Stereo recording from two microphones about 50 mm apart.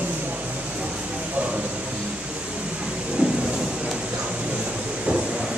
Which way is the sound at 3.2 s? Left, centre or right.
Right.